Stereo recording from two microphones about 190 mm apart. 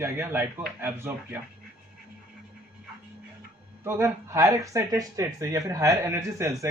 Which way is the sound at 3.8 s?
15° right (ahead or behind).